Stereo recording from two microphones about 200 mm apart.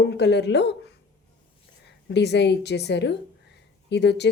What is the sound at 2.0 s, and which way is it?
A woman's voice, 60° left (ahead or behind).